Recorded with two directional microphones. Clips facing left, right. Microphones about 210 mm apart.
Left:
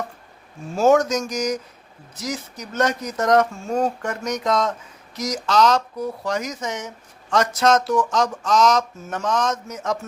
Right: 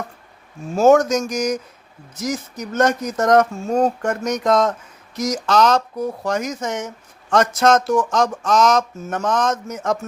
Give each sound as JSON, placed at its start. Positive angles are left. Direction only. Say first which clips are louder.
{"t": 0.8, "sound": "speech", "louder": "right 3 dB", "side_deg": -45}